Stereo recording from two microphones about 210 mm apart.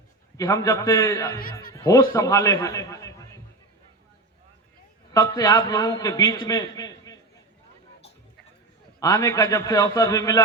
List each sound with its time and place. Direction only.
0.3 s a man's voice: 15° left (ahead or behind)
5.1 s a man's voice: 15° left (ahead or behind)
9.0 s a man's voice: 15° left (ahead or behind)